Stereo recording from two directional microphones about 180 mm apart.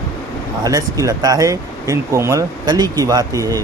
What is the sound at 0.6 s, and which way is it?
Speech, 20° right (ahead or behind).